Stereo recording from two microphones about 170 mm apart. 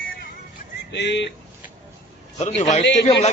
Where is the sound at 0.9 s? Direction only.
90° left.